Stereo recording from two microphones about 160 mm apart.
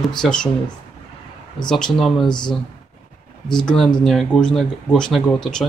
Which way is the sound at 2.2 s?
25° left (ahead or behind).